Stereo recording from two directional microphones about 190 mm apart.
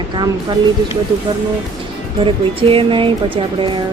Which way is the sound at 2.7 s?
25° right (ahead or behind).